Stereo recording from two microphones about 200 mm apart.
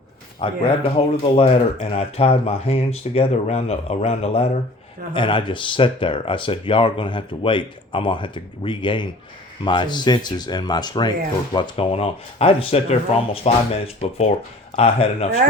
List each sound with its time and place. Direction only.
0.3 s speech: 25° left (ahead or behind)